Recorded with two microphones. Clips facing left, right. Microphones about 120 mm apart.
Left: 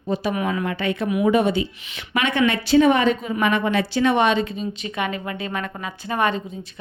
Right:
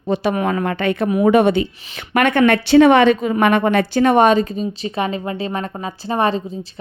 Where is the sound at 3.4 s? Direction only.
60° right (ahead or behind).